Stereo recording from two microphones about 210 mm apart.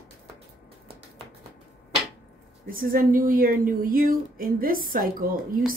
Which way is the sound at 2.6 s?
40° right (ahead or behind).